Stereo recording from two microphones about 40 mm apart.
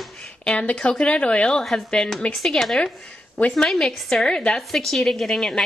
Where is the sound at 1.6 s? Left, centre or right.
Centre.